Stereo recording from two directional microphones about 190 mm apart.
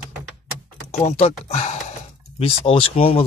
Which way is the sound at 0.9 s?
35° left (ahead or behind).